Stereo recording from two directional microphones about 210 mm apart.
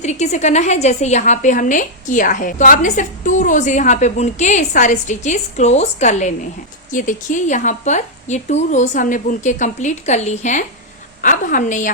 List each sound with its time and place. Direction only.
0.0 s a woman's voice: 35° left (ahead or behind)